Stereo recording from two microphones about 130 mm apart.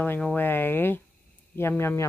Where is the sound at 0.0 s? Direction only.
10° left (ahead or behind).